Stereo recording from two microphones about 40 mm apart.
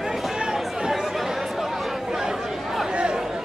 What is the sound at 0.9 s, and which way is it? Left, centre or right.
Chatter, centre.